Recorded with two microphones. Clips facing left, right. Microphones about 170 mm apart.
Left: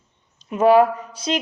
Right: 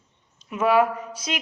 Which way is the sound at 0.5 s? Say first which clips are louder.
Left 6 dB; 35° left (ahead or behind).